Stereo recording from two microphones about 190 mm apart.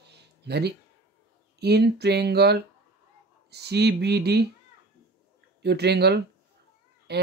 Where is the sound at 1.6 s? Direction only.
60° right (ahead or behind).